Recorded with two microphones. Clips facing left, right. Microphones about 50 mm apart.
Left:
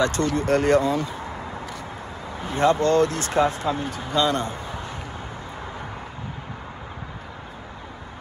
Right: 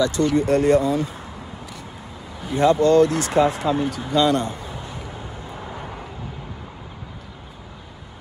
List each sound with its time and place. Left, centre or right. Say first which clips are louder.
0.0 s speech: right 3 dB; left
2.4 s a man's voice: right 3 dB; left